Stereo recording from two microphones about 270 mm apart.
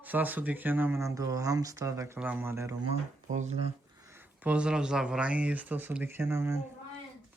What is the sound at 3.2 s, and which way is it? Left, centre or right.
Speech, right.